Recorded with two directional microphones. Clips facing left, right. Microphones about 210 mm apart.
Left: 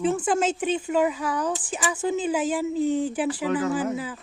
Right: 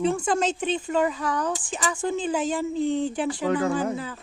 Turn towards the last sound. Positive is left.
turn(degrees=5)  # may be behind; listen again after turning